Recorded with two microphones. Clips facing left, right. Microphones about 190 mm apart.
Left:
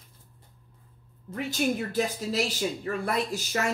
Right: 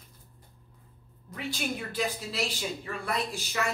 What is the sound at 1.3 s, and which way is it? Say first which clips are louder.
A woman's voice: left 6 dB; 45° left (ahead or behind).